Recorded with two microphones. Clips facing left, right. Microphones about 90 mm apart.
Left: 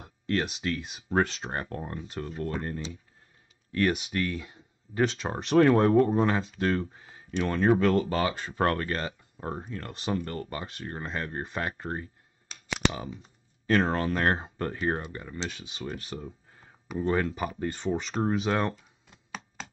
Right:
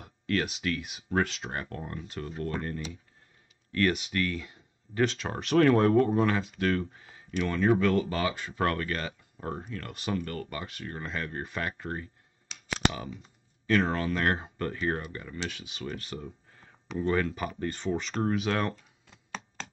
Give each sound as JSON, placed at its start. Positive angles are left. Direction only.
{"t": 0.0, "sound": "speech", "side_deg": 30}
{"t": 4.1, "sound": "speech", "side_deg": 20}
{"t": 5.0, "sound": "speech", "side_deg": 35}
{"t": 13.7, "sound": "speech", "side_deg": 40}
{"t": 16.2, "sound": "a sound", "side_deg": 10}
{"t": 17.1, "sound": "speech", "side_deg": 20}
{"t": 17.8, "sound": "speech", "side_deg": 10}
{"t": 18.2, "sound": "speech", "side_deg": 25}
{"t": 18.8, "sound": "a sound", "side_deg": 5}